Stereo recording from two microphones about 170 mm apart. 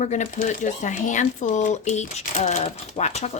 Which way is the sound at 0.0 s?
45° left (ahead or behind).